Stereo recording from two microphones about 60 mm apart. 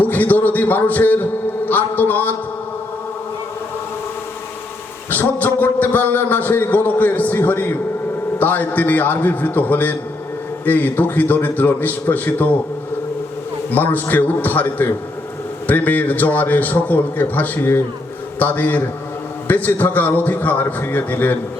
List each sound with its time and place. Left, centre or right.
0.0 s a man's voice: left
5.1 s a man's voice: left
13.7 s a man's voice: left